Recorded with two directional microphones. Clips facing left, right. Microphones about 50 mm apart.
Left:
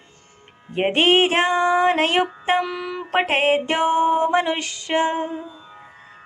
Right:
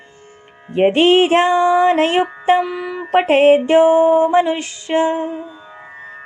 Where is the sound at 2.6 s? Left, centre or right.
Centre.